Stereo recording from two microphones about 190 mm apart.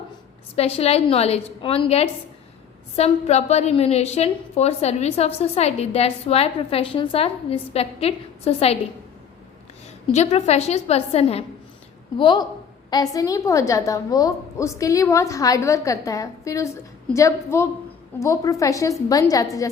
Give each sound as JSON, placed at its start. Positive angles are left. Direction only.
{"t": 0.5, "sound": "a woman's voice", "side_deg": 35}
{"t": 10.1, "sound": "a woman's voice", "side_deg": 35}